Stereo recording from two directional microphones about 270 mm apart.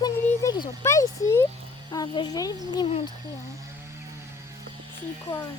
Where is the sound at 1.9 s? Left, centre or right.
Centre.